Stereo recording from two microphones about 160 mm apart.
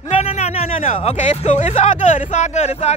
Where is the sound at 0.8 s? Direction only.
45° left (ahead or behind).